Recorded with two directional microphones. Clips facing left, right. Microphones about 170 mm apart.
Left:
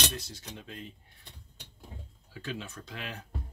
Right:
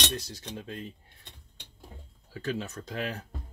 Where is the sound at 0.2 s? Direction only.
40° right (ahead or behind).